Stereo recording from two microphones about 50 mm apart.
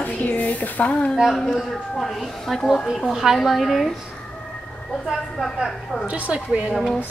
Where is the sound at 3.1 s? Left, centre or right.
Centre.